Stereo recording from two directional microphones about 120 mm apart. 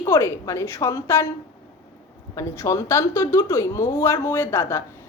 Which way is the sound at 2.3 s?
25° left (ahead or behind).